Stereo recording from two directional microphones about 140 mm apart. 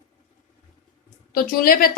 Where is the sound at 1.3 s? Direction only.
90° left.